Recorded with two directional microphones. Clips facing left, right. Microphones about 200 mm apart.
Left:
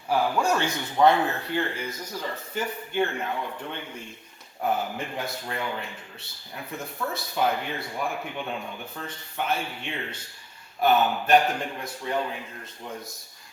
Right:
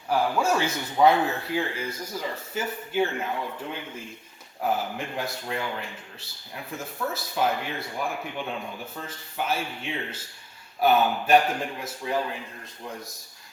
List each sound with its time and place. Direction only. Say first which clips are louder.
0.1 s speech: even; centre (ahead or behind)